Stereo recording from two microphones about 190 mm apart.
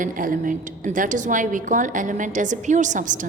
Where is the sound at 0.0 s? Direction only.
45° right (ahead or behind).